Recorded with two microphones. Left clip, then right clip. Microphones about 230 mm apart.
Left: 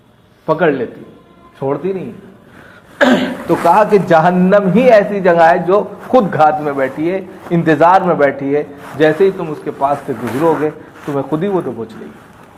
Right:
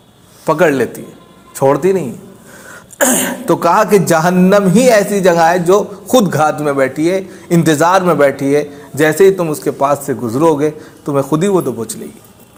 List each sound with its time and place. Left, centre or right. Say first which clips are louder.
0.4 s speech: right 2 dB; right
11.1 s speech: right 4 dB; right